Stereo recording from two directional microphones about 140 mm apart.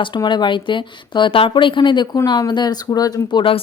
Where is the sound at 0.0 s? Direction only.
35° left (ahead or behind).